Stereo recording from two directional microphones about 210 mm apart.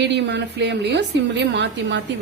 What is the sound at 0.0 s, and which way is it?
A woman's voice, 55° right (ahead or behind).